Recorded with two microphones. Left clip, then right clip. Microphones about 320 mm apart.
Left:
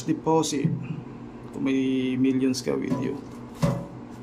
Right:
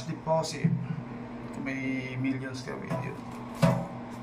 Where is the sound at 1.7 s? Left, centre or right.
Left.